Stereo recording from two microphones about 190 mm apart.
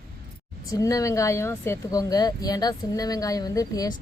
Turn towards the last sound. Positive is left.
turn(degrees=20)  # may be behind; listen again after turning